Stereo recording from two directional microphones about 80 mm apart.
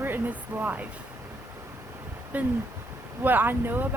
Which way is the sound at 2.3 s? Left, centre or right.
Centre.